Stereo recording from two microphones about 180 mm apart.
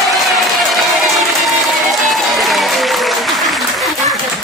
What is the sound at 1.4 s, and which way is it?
Applause, centre (ahead or behind).